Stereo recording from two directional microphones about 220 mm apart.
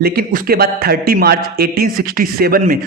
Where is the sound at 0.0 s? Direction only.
45° right (ahead or behind).